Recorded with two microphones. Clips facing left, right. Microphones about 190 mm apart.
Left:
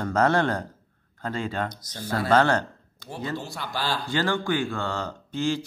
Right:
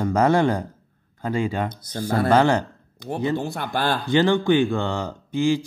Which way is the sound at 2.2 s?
10° right (ahead or behind).